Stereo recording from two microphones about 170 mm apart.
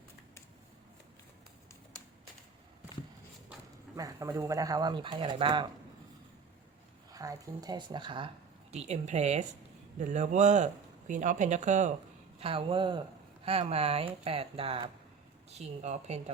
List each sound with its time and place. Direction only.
3.9 s speech: 20° right (ahead or behind)
7.1 s speech: 20° right (ahead or behind)
8.7 s speech: 40° right (ahead or behind)
12.4 s speech: 35° right (ahead or behind)